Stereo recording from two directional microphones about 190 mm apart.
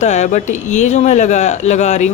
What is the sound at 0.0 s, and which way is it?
Speech, 40° left (ahead or behind).